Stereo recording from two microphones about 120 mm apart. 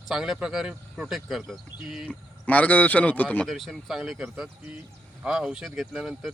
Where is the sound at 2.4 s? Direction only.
10° left (ahead or behind).